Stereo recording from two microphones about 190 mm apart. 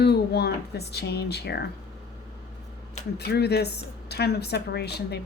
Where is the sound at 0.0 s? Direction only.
60° left (ahead or behind).